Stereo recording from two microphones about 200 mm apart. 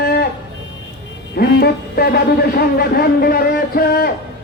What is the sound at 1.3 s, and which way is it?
Speech, 50° left (ahead or behind).